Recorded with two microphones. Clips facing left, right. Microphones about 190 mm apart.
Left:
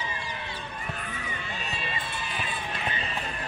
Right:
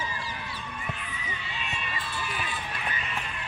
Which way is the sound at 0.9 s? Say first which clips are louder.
Left 3 dB; 50° left (ahead or behind).